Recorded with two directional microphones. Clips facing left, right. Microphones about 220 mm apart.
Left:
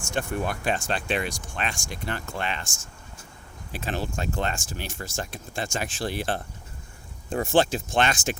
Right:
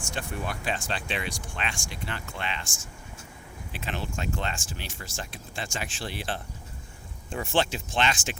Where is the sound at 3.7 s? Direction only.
40° left (ahead or behind).